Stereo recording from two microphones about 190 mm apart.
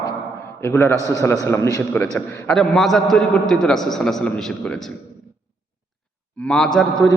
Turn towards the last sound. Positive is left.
turn(degrees=20)  # may be behind; listen again after turning